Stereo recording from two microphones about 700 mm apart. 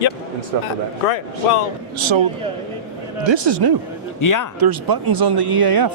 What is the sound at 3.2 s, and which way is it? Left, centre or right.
Speech, right.